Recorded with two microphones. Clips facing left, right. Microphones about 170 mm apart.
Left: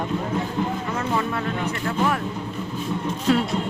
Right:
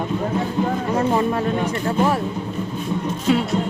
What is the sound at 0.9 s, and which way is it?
Speech, 35° right (ahead or behind).